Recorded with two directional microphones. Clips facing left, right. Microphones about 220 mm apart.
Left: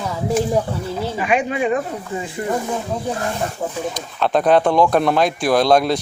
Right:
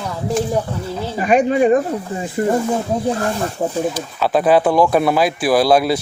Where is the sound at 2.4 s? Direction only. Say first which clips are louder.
Right 7 dB; 50° right (ahead or behind).